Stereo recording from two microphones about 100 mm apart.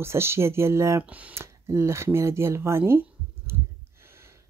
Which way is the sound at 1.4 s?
25° right (ahead or behind).